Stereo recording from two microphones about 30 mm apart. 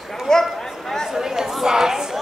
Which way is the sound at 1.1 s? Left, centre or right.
Centre.